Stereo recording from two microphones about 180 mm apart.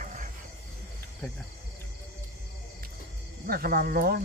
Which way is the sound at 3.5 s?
55° right (ahead or behind).